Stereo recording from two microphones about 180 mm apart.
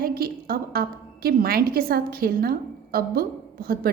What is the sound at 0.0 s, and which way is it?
A woman's voice, 55° right (ahead or behind).